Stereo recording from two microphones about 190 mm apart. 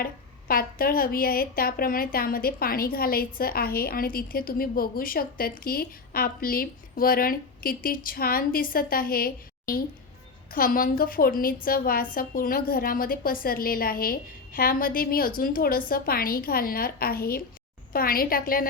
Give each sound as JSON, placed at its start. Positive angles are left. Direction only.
{"t": 0.0, "sound": "a woman's voice", "side_deg": 50}